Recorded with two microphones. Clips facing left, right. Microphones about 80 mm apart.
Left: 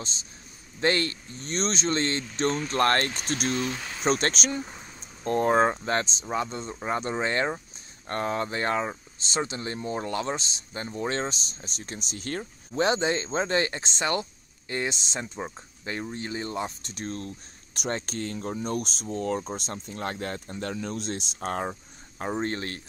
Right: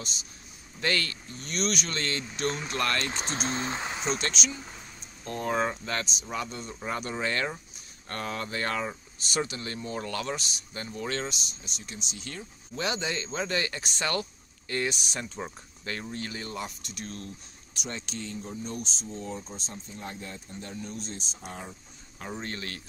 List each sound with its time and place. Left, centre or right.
0.0 s speech: left
3.1 s speech: right
4.0 s speech: left
12.7 s speech: left
17.7 s speech: left
21.5 s speech: left
22.2 s speech: left